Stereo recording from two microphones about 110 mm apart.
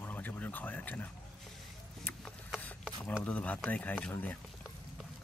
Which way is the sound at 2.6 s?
15° left (ahead or behind).